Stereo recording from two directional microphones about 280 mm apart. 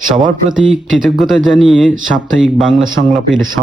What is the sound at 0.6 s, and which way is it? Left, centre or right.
Speech, centre.